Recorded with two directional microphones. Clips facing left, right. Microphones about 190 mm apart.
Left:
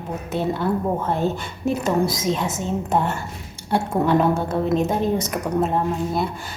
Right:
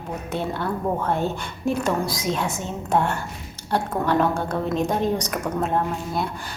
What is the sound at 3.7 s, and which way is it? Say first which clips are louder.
Speech: left 3 dB; 20° left (ahead or behind).